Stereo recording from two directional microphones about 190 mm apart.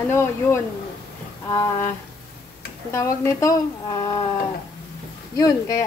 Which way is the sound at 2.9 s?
15° left (ahead or behind).